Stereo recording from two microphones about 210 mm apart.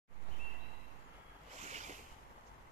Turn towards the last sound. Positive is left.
turn(degrees=-35)  # may be behind; listen again after turning